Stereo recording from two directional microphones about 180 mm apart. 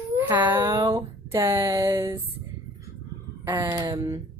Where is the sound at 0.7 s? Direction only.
20° right (ahead or behind).